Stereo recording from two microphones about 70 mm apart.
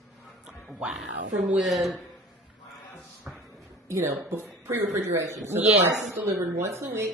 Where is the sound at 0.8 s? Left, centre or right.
Centre.